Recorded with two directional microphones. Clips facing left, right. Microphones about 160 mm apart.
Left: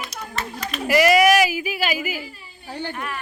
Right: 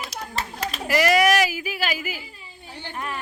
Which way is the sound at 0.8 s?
10° left (ahead or behind).